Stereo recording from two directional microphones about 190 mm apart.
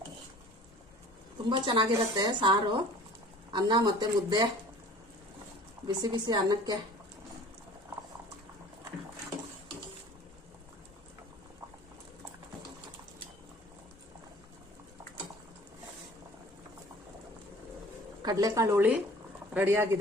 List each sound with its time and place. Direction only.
1.5 s a woman's voice: 25° right (ahead or behind)
5.9 s a woman's voice: 20° right (ahead or behind)
18.3 s a woman's voice: 20° right (ahead or behind)